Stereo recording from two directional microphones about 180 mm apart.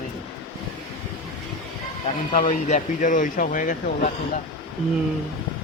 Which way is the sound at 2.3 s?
45° left (ahead or behind).